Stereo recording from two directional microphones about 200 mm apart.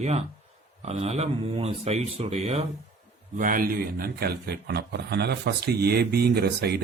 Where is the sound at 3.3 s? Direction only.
45° right (ahead or behind).